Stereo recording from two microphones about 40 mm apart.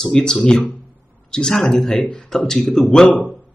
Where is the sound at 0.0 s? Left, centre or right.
Centre.